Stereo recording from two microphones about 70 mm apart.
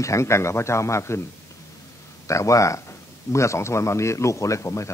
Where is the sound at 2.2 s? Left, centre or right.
Left.